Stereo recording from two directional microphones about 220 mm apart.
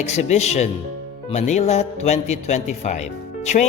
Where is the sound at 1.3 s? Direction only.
30° left (ahead or behind).